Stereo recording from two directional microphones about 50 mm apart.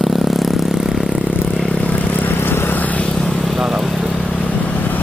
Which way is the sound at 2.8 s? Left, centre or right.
Left.